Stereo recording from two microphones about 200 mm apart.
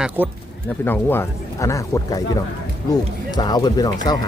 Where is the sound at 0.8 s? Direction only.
10° left (ahead or behind).